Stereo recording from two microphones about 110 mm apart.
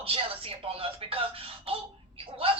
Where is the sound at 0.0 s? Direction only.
60° right (ahead or behind).